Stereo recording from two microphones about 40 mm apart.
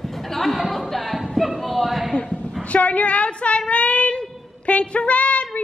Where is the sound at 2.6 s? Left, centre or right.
Left.